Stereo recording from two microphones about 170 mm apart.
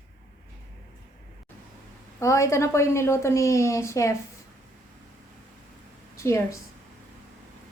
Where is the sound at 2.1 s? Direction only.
20° left (ahead or behind).